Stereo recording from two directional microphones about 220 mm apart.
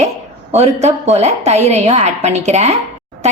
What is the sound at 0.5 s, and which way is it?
A woman's voice, 30° right (ahead or behind).